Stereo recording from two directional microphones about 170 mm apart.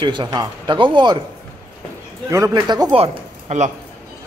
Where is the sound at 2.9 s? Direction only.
40° right (ahead or behind).